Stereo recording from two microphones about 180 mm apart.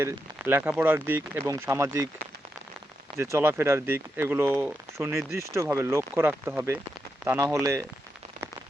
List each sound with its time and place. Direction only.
0.0 s speech: 10° right (ahead or behind)
3.2 s speech: 15° right (ahead or behind)